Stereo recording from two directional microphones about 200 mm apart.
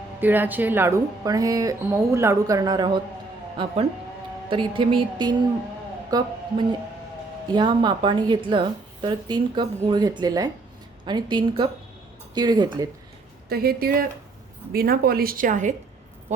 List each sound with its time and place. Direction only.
0.2 s speech: 10° right (ahead or behind)
4.4 s a woman's voice: 25° right (ahead or behind)
13.5 s a woman's voice: 50° right (ahead or behind)